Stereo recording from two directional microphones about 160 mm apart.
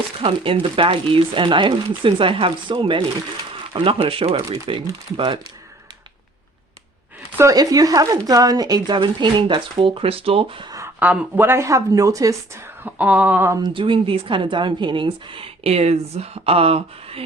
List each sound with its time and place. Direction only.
0.2 s a woman's voice: 35° right (ahead or behind)
7.3 s speech: 20° right (ahead or behind)
11.0 s speech: 10° right (ahead or behind)
13.6 s a woman's voice: 30° right (ahead or behind)